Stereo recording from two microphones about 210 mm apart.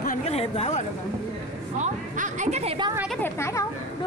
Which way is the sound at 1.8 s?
35° right (ahead or behind).